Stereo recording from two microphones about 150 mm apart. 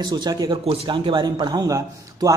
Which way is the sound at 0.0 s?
30° right (ahead or behind).